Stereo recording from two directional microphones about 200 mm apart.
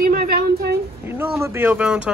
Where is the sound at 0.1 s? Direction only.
50° right (ahead or behind).